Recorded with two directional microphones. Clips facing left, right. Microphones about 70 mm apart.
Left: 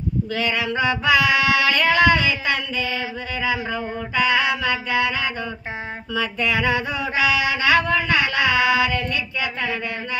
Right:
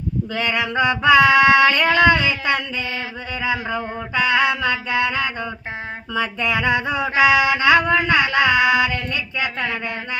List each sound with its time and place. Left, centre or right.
0.3 s mantra: right
0.7 s female singing: right
6.1 s mantra: right